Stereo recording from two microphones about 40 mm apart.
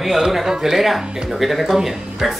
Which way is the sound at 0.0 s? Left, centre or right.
Centre.